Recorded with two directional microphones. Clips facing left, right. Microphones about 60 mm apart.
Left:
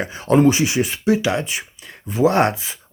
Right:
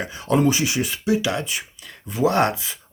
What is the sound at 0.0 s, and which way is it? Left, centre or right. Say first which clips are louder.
Speech: left 5 dB; left.